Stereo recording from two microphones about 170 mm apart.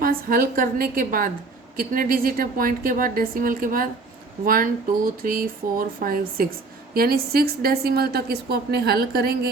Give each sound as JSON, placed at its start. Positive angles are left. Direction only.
{"t": 0.0, "sound": "a woman's voice", "side_deg": -60}